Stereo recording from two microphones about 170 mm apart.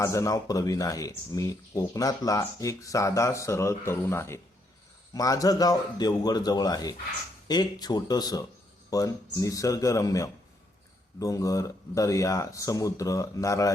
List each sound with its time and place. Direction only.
0.0 s speech: 20° left (ahead or behind)